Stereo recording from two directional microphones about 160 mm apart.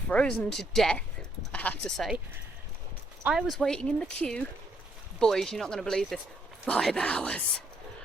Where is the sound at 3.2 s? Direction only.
Centre (ahead or behind).